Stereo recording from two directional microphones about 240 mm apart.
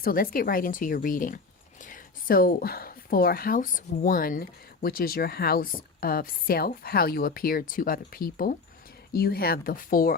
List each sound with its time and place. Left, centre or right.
0.0 s a woman's voice: left